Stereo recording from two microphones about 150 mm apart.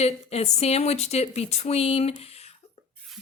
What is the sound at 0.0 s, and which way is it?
Speech, 45° left (ahead or behind).